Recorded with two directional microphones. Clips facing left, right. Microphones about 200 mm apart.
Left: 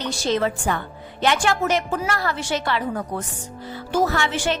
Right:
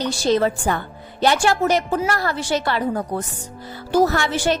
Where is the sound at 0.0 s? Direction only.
35° right (ahead or behind).